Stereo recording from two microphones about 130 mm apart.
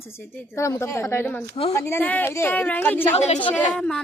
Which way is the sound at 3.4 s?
10° left (ahead or behind).